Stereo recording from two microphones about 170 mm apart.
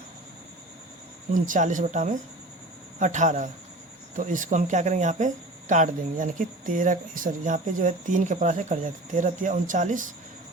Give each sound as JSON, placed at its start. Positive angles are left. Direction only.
{"t": 1.3, "sound": "speech", "side_deg": -50}